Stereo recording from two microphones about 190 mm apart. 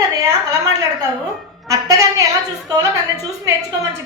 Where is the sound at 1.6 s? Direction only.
15° right (ahead or behind).